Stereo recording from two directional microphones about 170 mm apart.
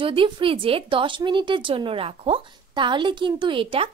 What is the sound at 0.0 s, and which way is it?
A woman's voice, 30° right (ahead or behind).